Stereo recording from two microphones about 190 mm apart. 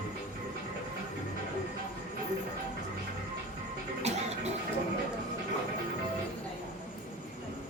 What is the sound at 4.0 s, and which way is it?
Music, 35° right (ahead or behind).